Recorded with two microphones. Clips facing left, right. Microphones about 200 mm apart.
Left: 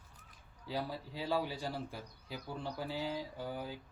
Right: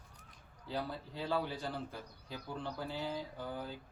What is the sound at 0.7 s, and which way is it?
A man's voice, 10° left (ahead or behind).